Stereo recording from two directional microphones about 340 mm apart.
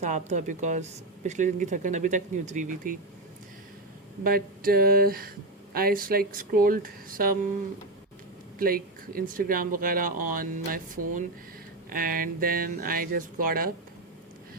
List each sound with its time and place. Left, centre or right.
0.0 s speech: right
4.2 s speech: right
8.5 s speech: right